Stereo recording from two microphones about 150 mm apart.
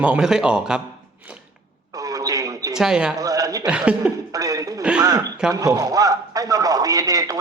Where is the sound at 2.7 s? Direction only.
5° right (ahead or behind).